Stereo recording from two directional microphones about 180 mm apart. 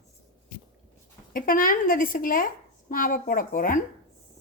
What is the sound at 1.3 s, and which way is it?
Speech, 50° left (ahead or behind).